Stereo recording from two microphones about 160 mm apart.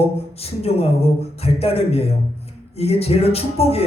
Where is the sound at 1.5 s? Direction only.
40° left (ahead or behind).